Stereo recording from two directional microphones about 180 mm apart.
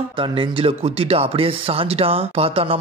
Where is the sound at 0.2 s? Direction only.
30° right (ahead or behind).